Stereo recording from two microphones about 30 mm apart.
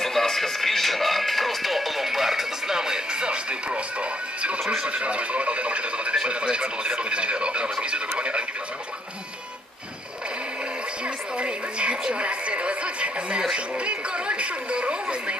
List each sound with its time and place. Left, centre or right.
0.0 s music: centre; by 4.6 s right
4.9 s radio: right
11.0 s television: right
13.7 s a sound: right